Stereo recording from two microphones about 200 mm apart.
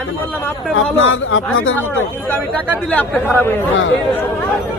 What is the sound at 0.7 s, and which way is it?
Speech, 80° left.